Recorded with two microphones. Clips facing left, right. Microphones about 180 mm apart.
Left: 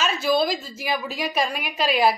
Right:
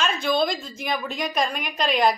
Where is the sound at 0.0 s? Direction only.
5° left (ahead or behind).